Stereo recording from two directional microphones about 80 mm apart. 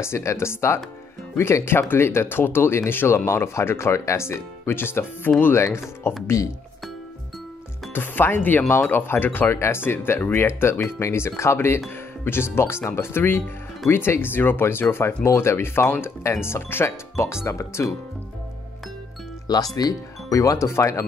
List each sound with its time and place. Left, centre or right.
0.0 s speech: left
7.9 s speech: left
19.7 s speech: left